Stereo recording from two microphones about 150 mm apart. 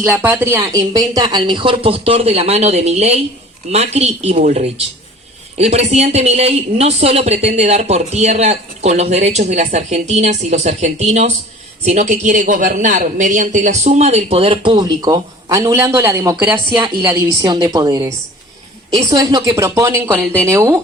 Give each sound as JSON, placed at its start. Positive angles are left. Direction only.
{"t": 0.1, "sound": "a man's voice", "side_deg": -10}
{"t": 16.7, "sound": "a woman's voice", "side_deg": -30}